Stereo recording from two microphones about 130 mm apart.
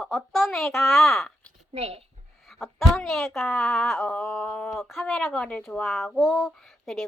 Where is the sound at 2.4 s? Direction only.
Centre (ahead or behind).